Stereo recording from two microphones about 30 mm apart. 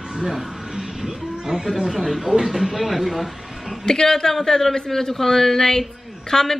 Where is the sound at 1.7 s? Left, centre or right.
Centre.